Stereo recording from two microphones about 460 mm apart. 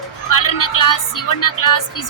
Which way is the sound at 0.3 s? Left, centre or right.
Left.